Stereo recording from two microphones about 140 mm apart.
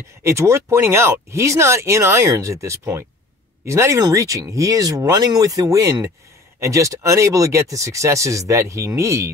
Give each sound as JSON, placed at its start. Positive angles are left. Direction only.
{"t": 0.2, "sound": "speech", "side_deg": -20}